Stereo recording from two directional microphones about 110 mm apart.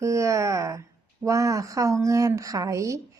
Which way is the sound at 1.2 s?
30° right (ahead or behind).